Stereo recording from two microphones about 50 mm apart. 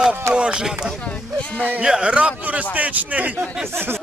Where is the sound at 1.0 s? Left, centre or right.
Left.